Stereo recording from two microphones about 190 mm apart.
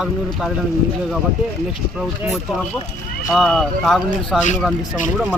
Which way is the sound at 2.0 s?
Centre (ahead or behind).